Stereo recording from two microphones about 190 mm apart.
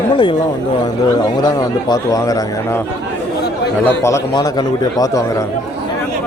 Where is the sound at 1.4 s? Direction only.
20° left (ahead or behind).